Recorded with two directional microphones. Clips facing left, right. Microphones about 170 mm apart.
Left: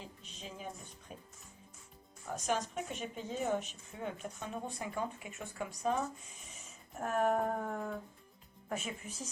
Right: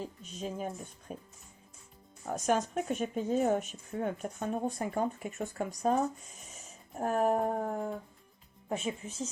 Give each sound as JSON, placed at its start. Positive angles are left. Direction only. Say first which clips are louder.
{"t": 0.0, "sound": "speech", "louder": "right 10 dB", "side_deg": -45}
{"t": 2.2, "sound": "speech", "louder": "right 6 dB", "side_deg": -45}
{"t": 6.9, "sound": "a sound", "louder": "right 3 dB", "side_deg": -35}
{"t": 8.7, "sound": "speech", "louder": "right 5 dB", "side_deg": -30}